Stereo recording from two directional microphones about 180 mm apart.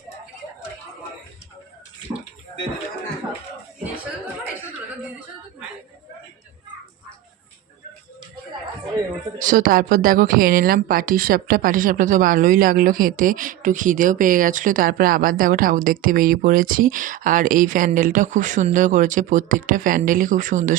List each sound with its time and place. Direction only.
9.4 s a woman's voice: 45° right (ahead or behind)